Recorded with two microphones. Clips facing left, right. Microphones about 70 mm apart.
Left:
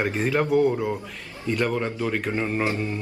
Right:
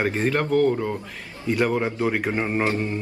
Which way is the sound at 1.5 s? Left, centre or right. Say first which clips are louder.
Right 3 dB; centre.